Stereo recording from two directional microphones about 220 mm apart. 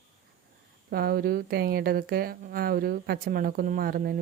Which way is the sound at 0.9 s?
45° right (ahead or behind).